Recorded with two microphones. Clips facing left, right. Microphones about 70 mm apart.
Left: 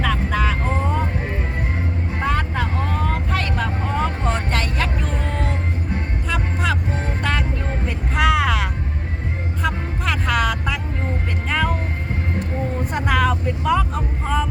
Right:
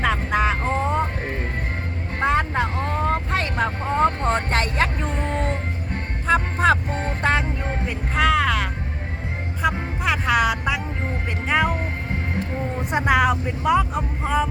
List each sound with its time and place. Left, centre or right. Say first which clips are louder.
0.0 s vehicle: right 1 dB; right
2.2 s vehicle: right 3 dB; right
6.2 s music: right 6 dB; right
7.2 s vehicle: right 4 dB; right
7.9 s vehicle: left 1 dB; centre
9.6 s music: right 2 dB; centre
12.9 s vehicle: right 2 dB; centre